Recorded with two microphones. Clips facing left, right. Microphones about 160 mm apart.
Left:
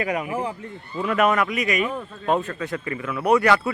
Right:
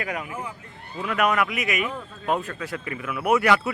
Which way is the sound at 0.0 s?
10° left (ahead or behind).